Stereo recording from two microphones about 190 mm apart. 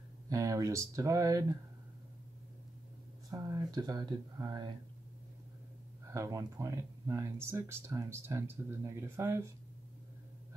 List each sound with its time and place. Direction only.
0.3 s speech: 15° right (ahead or behind)
3.3 s speech: 15° right (ahead or behind)
6.0 s speech: 15° right (ahead or behind)